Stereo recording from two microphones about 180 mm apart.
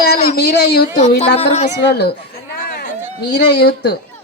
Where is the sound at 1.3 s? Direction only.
35° left (ahead or behind).